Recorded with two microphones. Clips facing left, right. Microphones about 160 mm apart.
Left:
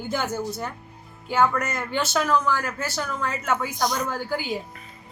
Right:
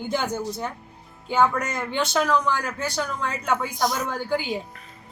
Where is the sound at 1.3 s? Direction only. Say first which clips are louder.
Right 1 dB; 5° left (ahead or behind).